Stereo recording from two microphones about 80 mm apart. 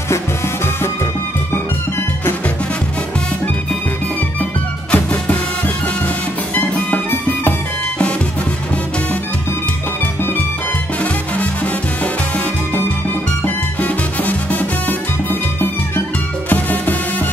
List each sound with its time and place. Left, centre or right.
4.9 s music: centre
6.5 s music: left
11.3 s salsa music: centre
13.7 s salsa music: centre
16.4 s music: left